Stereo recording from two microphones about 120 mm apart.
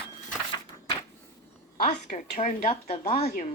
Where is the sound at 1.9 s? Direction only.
85° left; by 3.3 s 55° left (ahead or behind).